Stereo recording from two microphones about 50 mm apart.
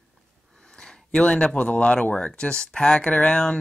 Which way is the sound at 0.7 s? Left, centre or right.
Centre.